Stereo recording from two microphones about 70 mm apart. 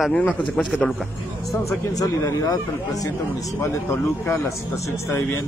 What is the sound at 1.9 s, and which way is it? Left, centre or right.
Speech, left.